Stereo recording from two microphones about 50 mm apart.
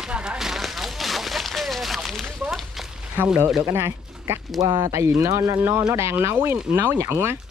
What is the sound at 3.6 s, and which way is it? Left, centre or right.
Speech, right.